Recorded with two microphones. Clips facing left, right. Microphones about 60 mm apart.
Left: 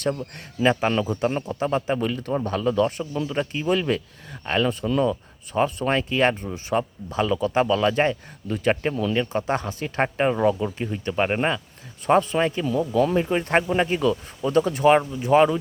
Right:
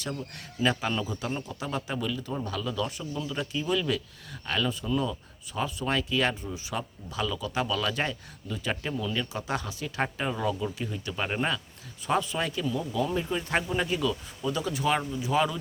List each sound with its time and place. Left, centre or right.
0.0 s speech: left
0.9 s a man's voice: left
1.5 s speech: left
4.7 s speech: left
9.1 s speech: left
12.6 s speech: left